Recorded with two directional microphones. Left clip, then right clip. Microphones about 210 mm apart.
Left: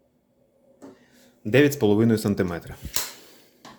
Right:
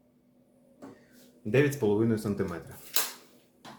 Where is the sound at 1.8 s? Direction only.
45° left (ahead or behind).